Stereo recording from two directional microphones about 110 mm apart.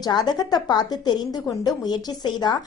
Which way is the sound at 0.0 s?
40° left (ahead or behind).